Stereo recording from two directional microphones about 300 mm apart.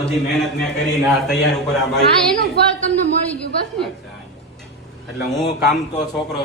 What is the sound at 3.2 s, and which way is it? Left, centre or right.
Speech, centre.